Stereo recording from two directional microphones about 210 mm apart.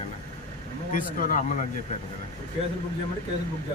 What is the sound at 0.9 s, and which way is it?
Speech, 40° left (ahead or behind).